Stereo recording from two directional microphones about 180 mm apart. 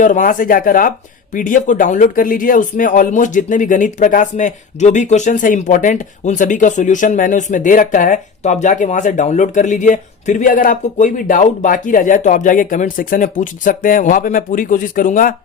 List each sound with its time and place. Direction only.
0.0 s speech: 45° left (ahead or behind)